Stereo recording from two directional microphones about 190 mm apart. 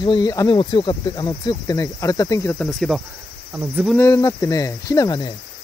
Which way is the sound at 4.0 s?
15° left (ahead or behind).